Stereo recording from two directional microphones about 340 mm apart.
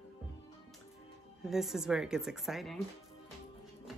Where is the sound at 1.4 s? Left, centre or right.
Centre.